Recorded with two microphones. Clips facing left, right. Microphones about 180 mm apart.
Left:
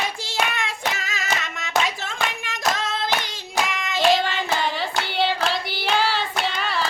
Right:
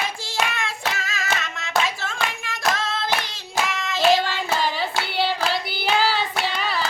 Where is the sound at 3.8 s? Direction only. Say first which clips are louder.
Left 1 dB; 20° left (ahead or behind).